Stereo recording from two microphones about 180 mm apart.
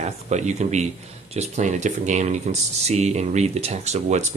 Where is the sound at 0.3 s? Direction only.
40° right (ahead or behind).